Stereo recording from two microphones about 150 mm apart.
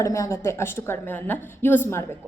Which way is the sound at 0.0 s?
20° left (ahead or behind).